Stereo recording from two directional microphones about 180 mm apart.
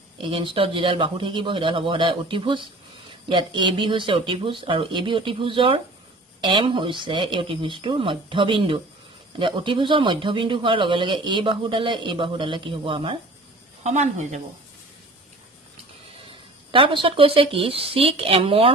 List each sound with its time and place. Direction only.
0.2 s speech: 30° right (ahead or behind)
13.8 s speech: 40° right (ahead or behind)
16.3 s a woman's voice: 30° right (ahead or behind)